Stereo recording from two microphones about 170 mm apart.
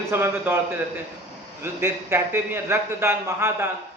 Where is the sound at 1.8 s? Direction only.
15° right (ahead or behind).